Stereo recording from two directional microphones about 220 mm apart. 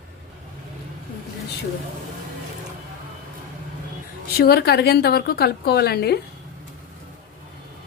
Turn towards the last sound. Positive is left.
turn(degrees=45)  # may be behind; listen again after turning